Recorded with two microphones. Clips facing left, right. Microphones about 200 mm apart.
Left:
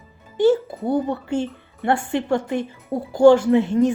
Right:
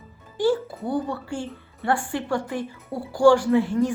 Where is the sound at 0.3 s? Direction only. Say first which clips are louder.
Left 5 dB; 20° left (ahead or behind).